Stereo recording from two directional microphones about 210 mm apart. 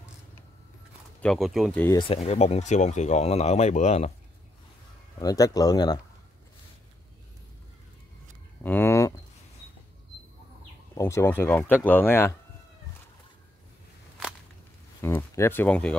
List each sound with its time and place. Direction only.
1.2 s speech: centre (ahead or behind)
2.0 s speech: 25° left (ahead or behind)
5.2 s speech: 15° left (ahead or behind)
8.6 s a sound: 10° left (ahead or behind)
11.0 s speech: 10° left (ahead or behind)
15.0 s a sound: 10° left (ahead or behind)